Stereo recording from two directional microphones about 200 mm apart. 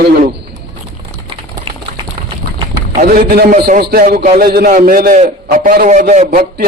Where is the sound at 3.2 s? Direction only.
50° right (ahead or behind).